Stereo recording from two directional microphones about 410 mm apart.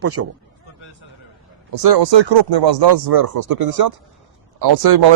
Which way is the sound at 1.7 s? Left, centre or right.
Right.